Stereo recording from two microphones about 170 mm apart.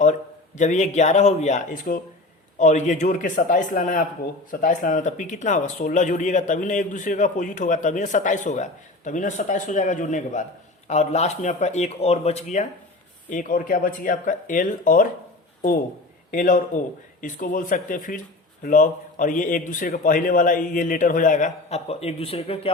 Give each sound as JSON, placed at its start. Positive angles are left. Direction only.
{"t": 0.0, "sound": "speech", "side_deg": 45}
{"t": 13.3, "sound": "speech", "side_deg": 55}
{"t": 16.3, "sound": "speech", "side_deg": 50}